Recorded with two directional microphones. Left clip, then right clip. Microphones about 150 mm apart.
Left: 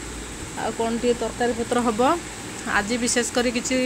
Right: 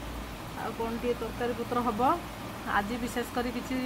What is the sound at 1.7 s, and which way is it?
Speech, 30° left (ahead or behind).